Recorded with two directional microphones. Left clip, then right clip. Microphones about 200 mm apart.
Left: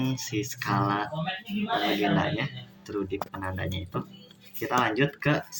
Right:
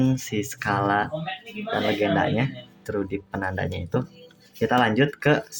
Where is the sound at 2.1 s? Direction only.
55° right (ahead or behind).